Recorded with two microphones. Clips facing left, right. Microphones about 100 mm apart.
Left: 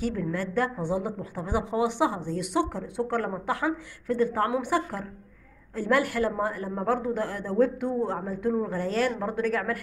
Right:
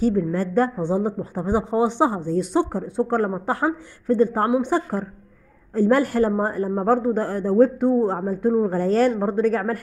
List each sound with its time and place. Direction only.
0.0 s speech: 35° right (ahead or behind)